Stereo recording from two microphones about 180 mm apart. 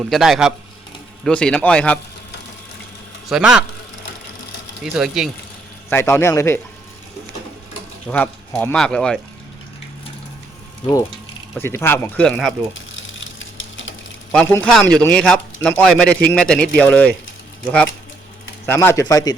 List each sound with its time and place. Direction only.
0.0 s a man's voice: centre (ahead or behind)
3.2 s a man's voice: 5° right (ahead or behind)
4.8 s a man's voice: 5° right (ahead or behind)
5.9 s speech: 15° left (ahead or behind)
8.0 s a man's voice: 10° left (ahead or behind)
11.5 s speech: 15° left (ahead or behind)
12.7 s a sound: 90° left
14.3 s a man's voice: 10° left (ahead or behind)
18.6 s speech: 15° left (ahead or behind)